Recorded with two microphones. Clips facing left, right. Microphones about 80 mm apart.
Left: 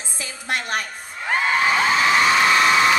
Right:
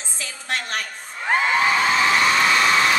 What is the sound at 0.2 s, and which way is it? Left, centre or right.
Music, centre.